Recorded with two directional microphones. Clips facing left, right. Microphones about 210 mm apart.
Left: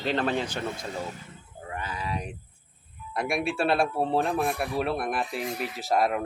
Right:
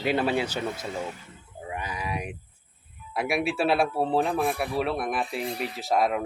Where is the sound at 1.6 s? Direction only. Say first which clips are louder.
Right 1 dB; 15° right (ahead or behind).